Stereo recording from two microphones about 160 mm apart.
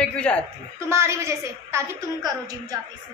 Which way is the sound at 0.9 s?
15° right (ahead or behind).